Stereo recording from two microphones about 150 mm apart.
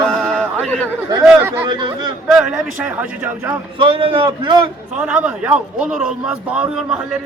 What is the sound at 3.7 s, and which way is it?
Speech, 35° right (ahead or behind).